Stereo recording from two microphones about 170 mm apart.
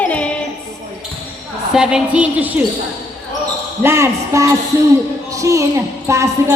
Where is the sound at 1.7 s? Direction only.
5° right (ahead or behind).